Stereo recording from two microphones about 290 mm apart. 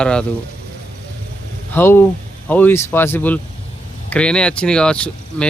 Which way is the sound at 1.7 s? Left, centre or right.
Centre.